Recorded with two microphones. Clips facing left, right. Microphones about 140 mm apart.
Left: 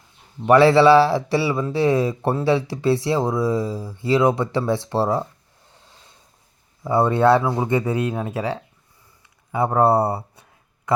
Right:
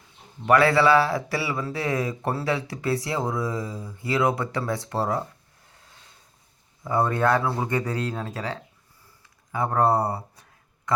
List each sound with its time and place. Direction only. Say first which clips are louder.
0.4 s speech: left 6 dB; 25° left (ahead or behind)
6.8 s speech: left 6 dB; 25° left (ahead or behind)